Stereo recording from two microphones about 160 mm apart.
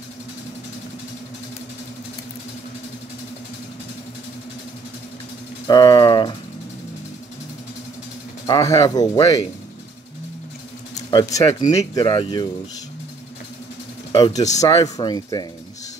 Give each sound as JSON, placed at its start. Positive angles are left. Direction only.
{"t": 5.7, "sound": "a sound", "side_deg": 25}
{"t": 8.5, "sound": "speech", "side_deg": 20}
{"t": 11.0, "sound": "speech", "side_deg": 25}
{"t": 14.1, "sound": "speech", "side_deg": 25}